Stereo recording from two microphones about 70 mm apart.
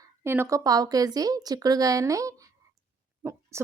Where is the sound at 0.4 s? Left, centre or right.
Right.